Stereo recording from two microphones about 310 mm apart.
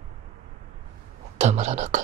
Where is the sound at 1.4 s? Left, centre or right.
Right.